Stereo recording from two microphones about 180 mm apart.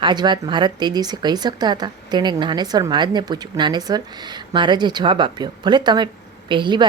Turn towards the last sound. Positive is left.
turn(degrees=-25)  # may be behind; listen again after turning